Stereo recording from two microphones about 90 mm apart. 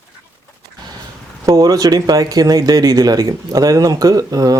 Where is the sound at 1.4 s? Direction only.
40° right (ahead or behind).